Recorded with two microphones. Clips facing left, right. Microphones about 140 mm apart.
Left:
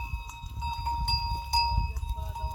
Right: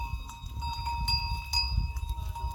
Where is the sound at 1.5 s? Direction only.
60° left (ahead or behind).